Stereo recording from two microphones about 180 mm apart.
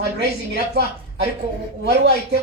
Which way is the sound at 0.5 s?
65° right (ahead or behind).